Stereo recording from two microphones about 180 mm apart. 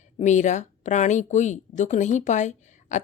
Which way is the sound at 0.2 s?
40° left (ahead or behind).